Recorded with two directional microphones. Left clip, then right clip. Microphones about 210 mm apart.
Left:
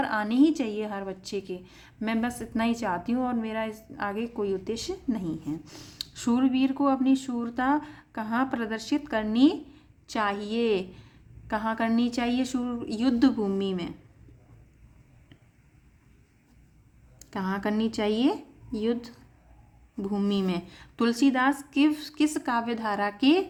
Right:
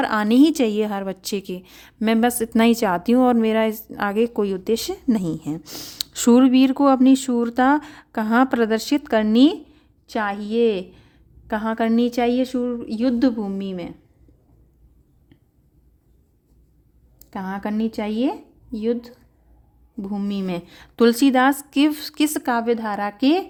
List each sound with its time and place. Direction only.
0.0 s a woman's voice: 45° right (ahead or behind); by 13.9 s 25° right (ahead or behind)
17.2 s a woman's voice: 25° right (ahead or behind)